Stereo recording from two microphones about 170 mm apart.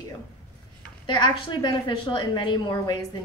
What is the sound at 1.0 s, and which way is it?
A woman's voice, 25° left (ahead or behind).